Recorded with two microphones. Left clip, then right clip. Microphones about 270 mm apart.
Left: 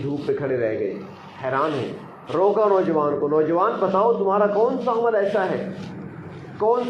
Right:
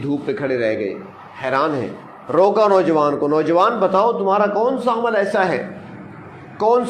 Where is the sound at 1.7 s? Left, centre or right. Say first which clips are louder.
Right 3 dB; centre.